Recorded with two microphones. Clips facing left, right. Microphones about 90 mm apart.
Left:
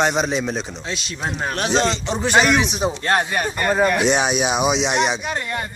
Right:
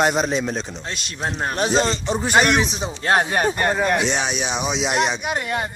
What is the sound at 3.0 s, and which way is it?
Speech, 15° right (ahead or behind).